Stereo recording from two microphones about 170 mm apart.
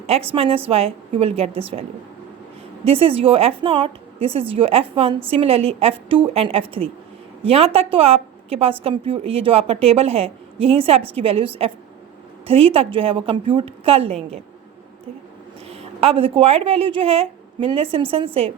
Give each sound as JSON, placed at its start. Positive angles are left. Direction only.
{"t": 0.1, "sound": "a woman's voice", "side_deg": -35}
{"t": 2.8, "sound": "a woman's voice", "side_deg": -35}
{"t": 15.7, "sound": "a woman's voice", "side_deg": -35}